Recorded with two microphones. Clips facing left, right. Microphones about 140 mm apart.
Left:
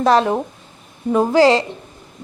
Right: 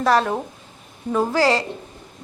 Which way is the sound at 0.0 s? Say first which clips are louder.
Left 4 dB; 20° left (ahead or behind).